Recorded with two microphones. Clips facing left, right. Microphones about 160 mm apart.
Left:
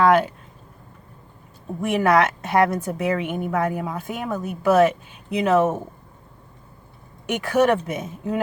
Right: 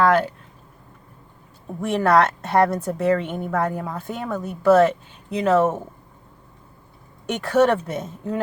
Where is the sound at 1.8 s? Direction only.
10° left (ahead or behind).